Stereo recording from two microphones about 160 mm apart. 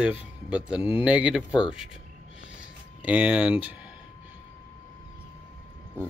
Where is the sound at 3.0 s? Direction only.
10° right (ahead or behind).